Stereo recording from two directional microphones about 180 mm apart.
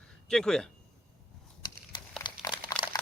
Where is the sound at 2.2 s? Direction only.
25° left (ahead or behind).